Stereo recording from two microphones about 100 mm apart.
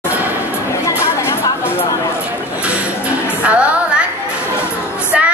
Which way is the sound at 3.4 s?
10° right (ahead or behind).